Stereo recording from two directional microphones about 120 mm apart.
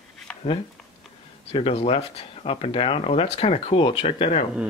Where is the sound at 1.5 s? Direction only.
55° left (ahead or behind).